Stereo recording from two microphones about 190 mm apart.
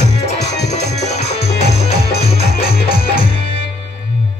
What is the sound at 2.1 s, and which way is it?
Music, 55° left (ahead or behind).